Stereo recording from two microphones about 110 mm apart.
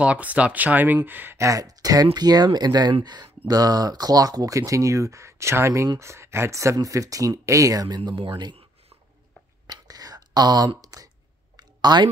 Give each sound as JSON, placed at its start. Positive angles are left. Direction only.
{"t": 0.0, "sound": "speech", "side_deg": -10}
{"t": 9.7, "sound": "whispering", "side_deg": -35}
{"t": 11.5, "sound": "a sound", "side_deg": -40}